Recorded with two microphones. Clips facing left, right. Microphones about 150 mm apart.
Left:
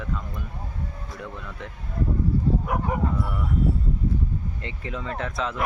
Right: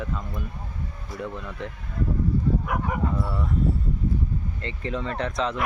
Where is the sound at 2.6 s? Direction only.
25° left (ahead or behind).